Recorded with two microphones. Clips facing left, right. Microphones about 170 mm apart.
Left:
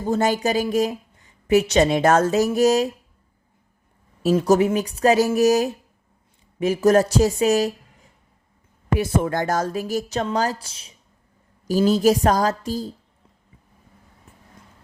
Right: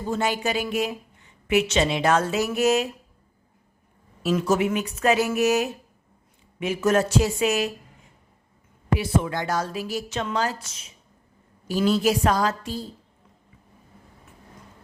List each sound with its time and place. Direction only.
0.0 s speech: 40° left (ahead or behind)
4.2 s speech: 35° left (ahead or behind)
9.0 s speech: 45° left (ahead or behind)